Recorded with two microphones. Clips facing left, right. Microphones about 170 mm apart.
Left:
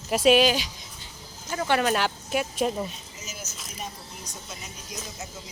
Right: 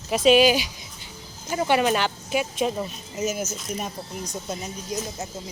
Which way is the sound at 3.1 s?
50° right (ahead or behind).